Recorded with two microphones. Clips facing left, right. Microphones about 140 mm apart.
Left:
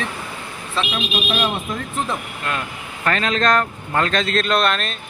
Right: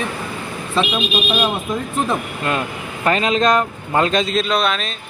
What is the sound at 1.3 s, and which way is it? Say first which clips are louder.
Speech: right 2 dB; 40° right (ahead or behind).